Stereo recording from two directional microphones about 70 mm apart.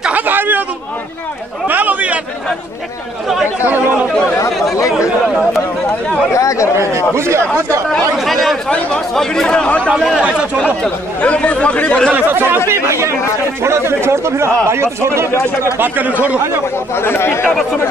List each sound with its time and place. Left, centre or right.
0.1 s a sound: right
1.7 s chatter: right
4.7 s chatter: left
6.3 s chatter: left
6.8 s chatter: right
8.2 s chatter: centre
8.6 s chatter: centre
9.9 s a sound: centre
10.6 s chatter: centre
12.3 s chatter: right
14.7 s speech: right
15.8 s speech: right
16.9 s chatter: left